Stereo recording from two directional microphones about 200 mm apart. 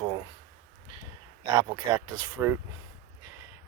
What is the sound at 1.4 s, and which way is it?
Speech, 20° right (ahead or behind).